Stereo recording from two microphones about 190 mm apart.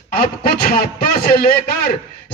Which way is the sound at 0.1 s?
55° left (ahead or behind).